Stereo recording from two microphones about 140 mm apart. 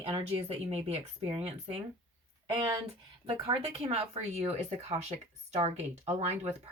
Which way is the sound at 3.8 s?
45° right (ahead or behind).